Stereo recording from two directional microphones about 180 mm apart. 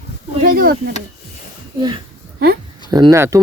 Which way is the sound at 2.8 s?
25° right (ahead or behind).